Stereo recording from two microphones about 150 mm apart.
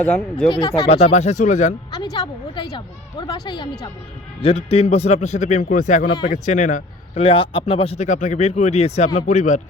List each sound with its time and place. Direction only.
0.0 s speech: 5° left (ahead or behind)
0.4 s a woman's voice: 35° left (ahead or behind)
0.9 s speech: 45° left (ahead or behind)
2.1 s a woman's voice: 30° left (ahead or behind)
4.4 s speech: 40° left (ahead or behind); by 7.2 s 60° left (ahead or behind)
7.2 s speech: 35° left (ahead or behind)